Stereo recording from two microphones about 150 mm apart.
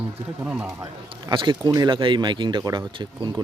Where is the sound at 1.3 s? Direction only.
30° right (ahead or behind).